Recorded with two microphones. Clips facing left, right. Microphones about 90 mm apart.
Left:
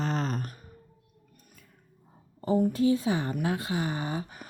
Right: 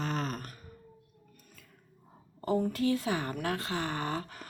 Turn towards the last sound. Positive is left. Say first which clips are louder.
# left 1 dB
turn(degrees=15)  # may be behind; listen again after turning